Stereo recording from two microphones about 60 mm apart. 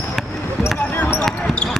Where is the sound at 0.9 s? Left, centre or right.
Left.